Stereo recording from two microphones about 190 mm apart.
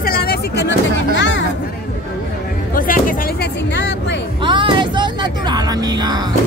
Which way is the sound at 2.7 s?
45° left (ahead or behind).